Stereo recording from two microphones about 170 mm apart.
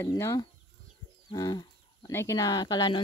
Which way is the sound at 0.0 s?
15° left (ahead or behind).